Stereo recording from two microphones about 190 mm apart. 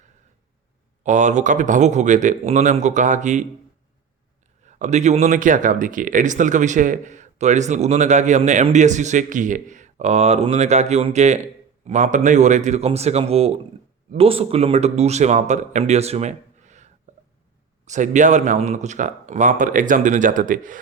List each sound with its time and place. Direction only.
1.0 s speech: 40° right (ahead or behind)
4.6 s speech: 40° right (ahead or behind)